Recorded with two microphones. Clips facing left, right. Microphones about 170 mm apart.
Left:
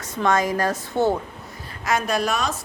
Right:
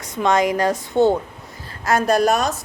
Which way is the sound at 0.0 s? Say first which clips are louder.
Right 3 dB; 15° right (ahead or behind).